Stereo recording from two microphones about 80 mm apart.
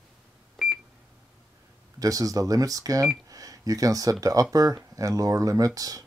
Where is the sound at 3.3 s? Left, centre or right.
Right.